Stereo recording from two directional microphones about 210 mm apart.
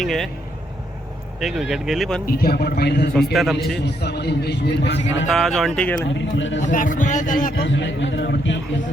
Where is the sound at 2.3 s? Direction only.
45° left (ahead or behind).